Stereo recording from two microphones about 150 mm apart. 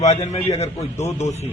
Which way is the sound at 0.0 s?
45° left (ahead or behind).